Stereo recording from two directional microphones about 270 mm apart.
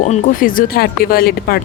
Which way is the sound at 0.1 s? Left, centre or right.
Left.